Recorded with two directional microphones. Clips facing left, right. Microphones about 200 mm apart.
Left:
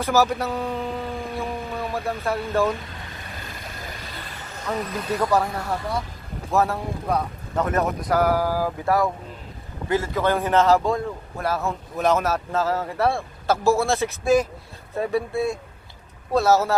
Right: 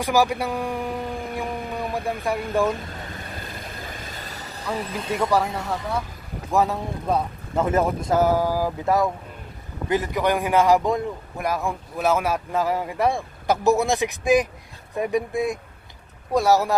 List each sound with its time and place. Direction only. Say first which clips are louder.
0.0 s speech: even; 15° right (ahead or behind)
4.0 s vehicle: right 1 dB; 45° right (ahead or behind)
4.6 s speech: left 1 dB; 10° right (ahead or behind)
4.9 s boat: left 1 dB; 25° right (ahead or behind)
6.5 s a man's voice: even; 15° right (ahead or behind)
8.0 s boat: right 1 dB; 25° right (ahead or behind)
9.9 s a man's voice: even; 15° right (ahead or behind)